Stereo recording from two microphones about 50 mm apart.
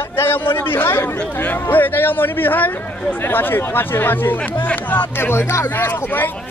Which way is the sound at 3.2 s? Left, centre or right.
Left.